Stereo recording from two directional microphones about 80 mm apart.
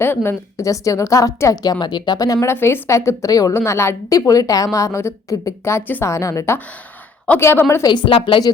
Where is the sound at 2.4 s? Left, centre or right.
Left.